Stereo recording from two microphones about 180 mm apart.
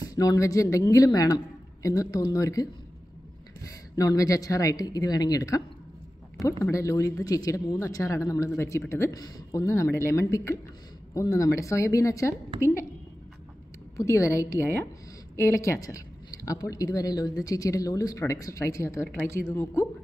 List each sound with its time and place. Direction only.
0.0 s speech: 20° left (ahead or behind)
3.9 s speech: 20° left (ahead or behind)
6.6 s speech: 15° left (ahead or behind)
13.9 s speech: 15° left (ahead or behind)